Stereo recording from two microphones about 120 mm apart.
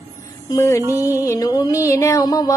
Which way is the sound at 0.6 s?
25° left (ahead or behind).